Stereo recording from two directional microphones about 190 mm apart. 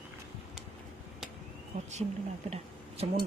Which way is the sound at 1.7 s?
40° right (ahead or behind).